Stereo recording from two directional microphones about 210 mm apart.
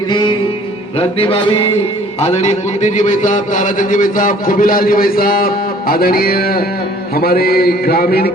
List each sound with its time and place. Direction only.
0.1 s music: 20° left (ahead or behind)
2.2 s a man's voice: 30° left (ahead or behind); by 8.3 s 45° left (ahead or behind)